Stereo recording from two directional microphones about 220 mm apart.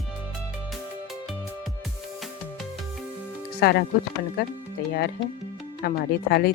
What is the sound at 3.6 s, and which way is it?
Speech, 50° left (ahead or behind).